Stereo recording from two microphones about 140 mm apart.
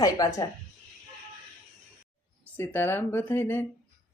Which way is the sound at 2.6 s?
15° left (ahead or behind).